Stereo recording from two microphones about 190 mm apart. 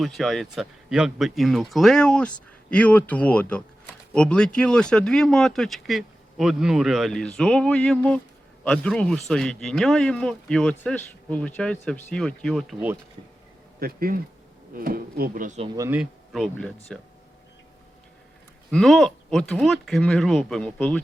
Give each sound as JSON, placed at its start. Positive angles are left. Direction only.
{"t": 0.0, "sound": "speech", "side_deg": 0}
{"t": 13.7, "sound": "speech", "side_deg": -50}
{"t": 15.6, "sound": "speech", "side_deg": -20}
{"t": 16.0, "sound": "speech", "side_deg": 0}
{"t": 18.7, "sound": "speech", "side_deg": 0}